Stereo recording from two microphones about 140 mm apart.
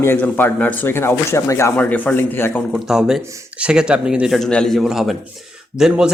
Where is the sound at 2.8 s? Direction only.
5° right (ahead or behind).